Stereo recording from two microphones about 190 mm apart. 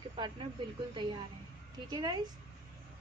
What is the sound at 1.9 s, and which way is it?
Speech, 20° right (ahead or behind).